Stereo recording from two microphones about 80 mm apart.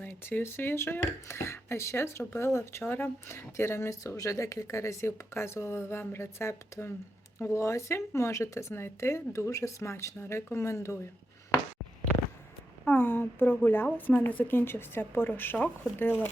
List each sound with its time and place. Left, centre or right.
0.1 s speech: left
12.8 s speech: left